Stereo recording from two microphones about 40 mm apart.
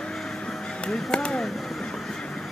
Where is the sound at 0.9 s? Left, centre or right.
Left.